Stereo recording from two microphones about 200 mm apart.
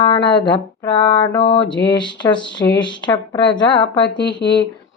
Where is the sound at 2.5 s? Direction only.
65° left (ahead or behind).